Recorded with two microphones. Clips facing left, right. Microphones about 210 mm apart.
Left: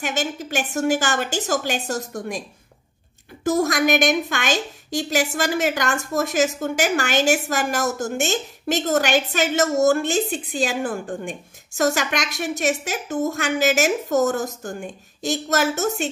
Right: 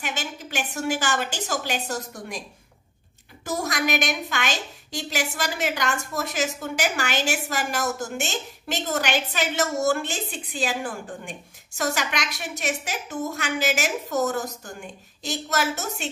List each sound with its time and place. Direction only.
0.0 s a woman's voice: 45° left (ahead or behind)
3.4 s a woman's voice: 45° left (ahead or behind)